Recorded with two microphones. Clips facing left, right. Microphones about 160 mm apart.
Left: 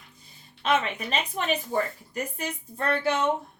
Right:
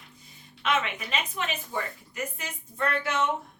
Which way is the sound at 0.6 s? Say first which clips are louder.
Left 3 dB; 35° left (ahead or behind).